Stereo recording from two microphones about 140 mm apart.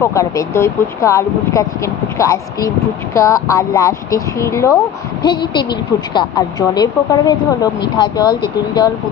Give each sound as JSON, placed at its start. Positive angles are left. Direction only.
{"t": 0.0, "sound": "speech", "side_deg": 20}
{"t": 5.2, "sound": "a woman's voice", "side_deg": 35}